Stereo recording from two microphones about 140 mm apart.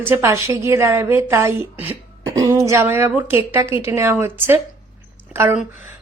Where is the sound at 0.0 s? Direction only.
20° right (ahead or behind).